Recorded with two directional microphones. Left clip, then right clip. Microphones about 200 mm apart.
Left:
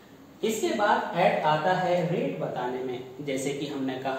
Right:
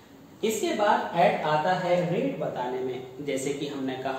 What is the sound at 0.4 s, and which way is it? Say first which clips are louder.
Speech: even; centre (ahead or behind).